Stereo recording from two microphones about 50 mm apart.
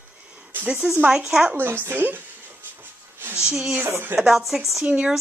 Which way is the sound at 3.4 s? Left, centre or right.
Centre.